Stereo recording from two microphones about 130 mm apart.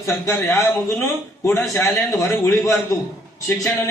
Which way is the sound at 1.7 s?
20° left (ahead or behind).